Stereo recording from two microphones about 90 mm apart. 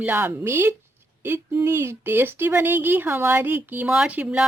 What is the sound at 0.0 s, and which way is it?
Speech, 25° right (ahead or behind).